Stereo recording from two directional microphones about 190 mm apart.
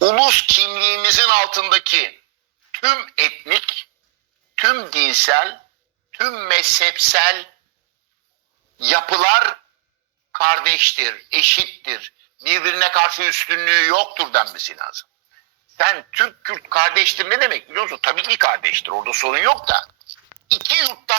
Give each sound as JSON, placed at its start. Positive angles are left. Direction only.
{"t": 0.0, "sound": "music", "side_deg": -55}
{"t": 2.7, "sound": "a sound", "side_deg": -55}
{"t": 4.5, "sound": "a man's voice", "side_deg": -55}
{"t": 8.8, "sound": "a man's voice", "side_deg": -55}